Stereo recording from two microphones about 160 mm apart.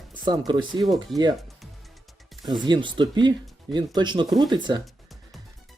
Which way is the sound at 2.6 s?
30° right (ahead or behind).